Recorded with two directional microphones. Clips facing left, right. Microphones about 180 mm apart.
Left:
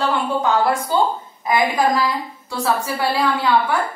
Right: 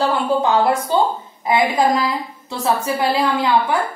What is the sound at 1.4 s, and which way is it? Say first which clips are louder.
A woman's voice: right 1 dB; 20° right (ahead or behind).